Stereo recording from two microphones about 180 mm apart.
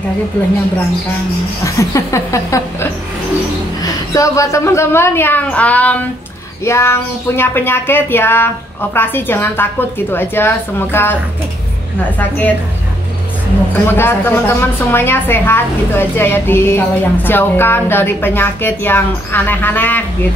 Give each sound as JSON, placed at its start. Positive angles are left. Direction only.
{"t": 1.6, "sound": "a woman's voice", "side_deg": 15}
{"t": 12.2, "sound": "a woman's voice", "side_deg": 10}
{"t": 13.8, "sound": "a woman's voice", "side_deg": 10}